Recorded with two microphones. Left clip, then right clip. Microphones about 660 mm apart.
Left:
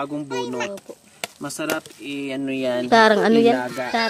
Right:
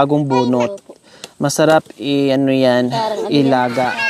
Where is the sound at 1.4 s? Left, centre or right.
Right.